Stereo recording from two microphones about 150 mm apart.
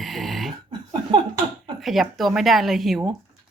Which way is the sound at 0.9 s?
35° right (ahead or behind).